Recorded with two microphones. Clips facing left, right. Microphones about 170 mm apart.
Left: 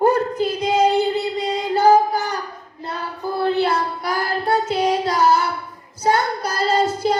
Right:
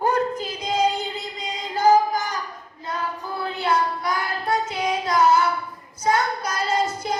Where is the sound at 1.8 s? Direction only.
30° left (ahead or behind).